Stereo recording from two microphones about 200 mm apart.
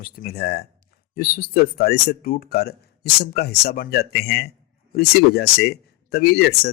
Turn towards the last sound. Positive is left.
turn(degrees=50)  # may be behind; listen again after turning